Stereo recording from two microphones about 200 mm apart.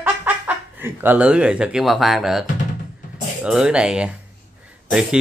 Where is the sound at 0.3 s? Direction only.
10° right (ahead or behind).